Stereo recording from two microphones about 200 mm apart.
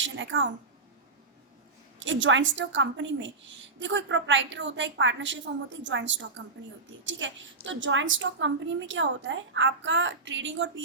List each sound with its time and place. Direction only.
0.0 s a woman's voice: 70° right (ahead or behind)
2.0 s a woman's voice: 70° right (ahead or behind)